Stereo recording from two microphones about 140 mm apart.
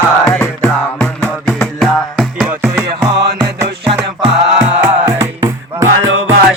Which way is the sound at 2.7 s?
25° right (ahead or behind).